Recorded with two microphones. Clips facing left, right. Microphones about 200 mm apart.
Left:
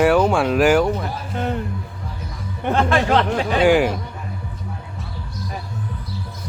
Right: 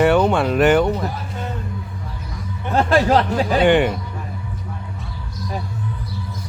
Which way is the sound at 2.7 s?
35° right (ahead or behind).